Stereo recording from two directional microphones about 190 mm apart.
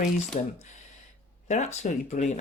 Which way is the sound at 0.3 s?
35° left (ahead or behind).